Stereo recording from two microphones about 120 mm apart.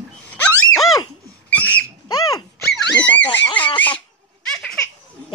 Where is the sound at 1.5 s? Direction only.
15° left (ahead or behind).